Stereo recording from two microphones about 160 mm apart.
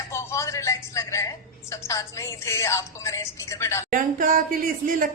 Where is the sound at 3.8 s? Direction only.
55° right (ahead or behind).